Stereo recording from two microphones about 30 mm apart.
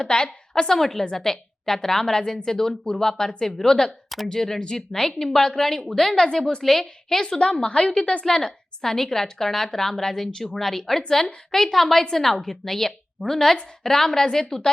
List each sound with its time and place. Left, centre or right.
0.0 s a woman's voice: left
0.7 s a woman's voice: centre
5.7 s a woman's voice: left
6.6 s a woman's voice: centre
7.3 s a woman's voice: left
8.2 s a woman's voice: left